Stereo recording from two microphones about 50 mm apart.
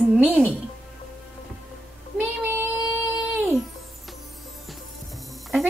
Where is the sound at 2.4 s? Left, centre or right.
Right.